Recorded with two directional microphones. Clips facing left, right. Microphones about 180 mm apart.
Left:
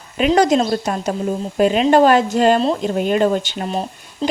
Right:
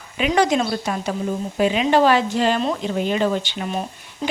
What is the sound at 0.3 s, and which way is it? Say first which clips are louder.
A woman's voice: left 3 dB; 40° left (ahead or behind).